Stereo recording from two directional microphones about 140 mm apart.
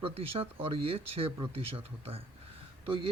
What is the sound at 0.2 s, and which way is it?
Speech, 45° right (ahead or behind).